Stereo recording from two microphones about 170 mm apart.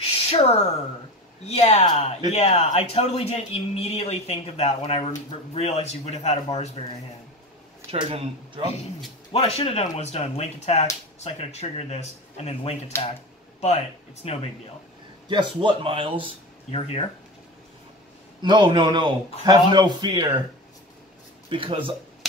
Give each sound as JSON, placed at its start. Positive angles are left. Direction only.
{"t": 0.3, "sound": "speech", "side_deg": 35}
{"t": 7.9, "sound": "speech", "side_deg": -35}
{"t": 9.3, "sound": "speech", "side_deg": 35}
{"t": 15.2, "sound": "speech", "side_deg": -30}
{"t": 16.7, "sound": "speech", "side_deg": 35}
{"t": 18.4, "sound": "a man's voice", "side_deg": -25}
{"t": 21.5, "sound": "speech", "side_deg": -30}